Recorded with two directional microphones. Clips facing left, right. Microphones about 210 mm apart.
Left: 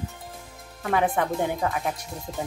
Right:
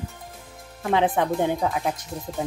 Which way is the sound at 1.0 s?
20° right (ahead or behind).